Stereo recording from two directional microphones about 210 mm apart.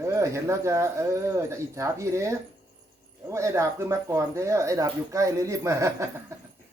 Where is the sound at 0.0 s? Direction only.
15° right (ahead or behind).